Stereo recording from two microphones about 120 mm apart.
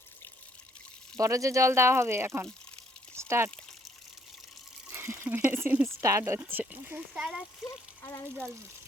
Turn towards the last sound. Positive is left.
turn(degrees=-5)  # may be behind; listen again after turning